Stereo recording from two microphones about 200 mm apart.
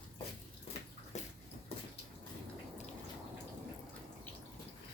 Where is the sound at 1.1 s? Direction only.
35° left (ahead or behind).